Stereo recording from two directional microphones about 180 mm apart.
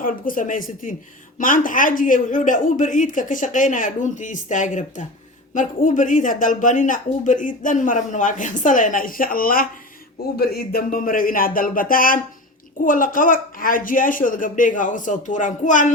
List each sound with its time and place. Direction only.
0.0 s speech: 50° left (ahead or behind)